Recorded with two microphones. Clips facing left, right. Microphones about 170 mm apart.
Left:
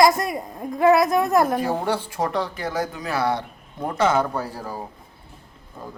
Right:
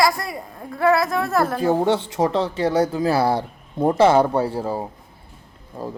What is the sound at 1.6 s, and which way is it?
Speech, 25° right (ahead or behind).